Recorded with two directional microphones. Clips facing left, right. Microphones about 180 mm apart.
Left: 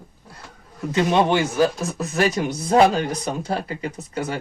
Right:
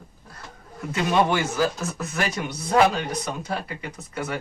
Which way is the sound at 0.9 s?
25° left (ahead or behind).